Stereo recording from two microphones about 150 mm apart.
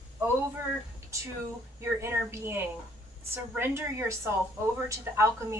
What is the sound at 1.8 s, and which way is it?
A woman's voice, 20° right (ahead or behind).